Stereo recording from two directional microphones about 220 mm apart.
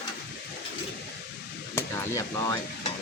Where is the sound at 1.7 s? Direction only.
15° left (ahead or behind).